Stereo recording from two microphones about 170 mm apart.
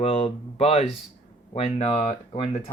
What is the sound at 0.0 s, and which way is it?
Speech, 35° left (ahead or behind).